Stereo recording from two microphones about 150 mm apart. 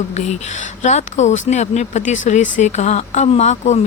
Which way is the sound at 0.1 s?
50° left (ahead or behind).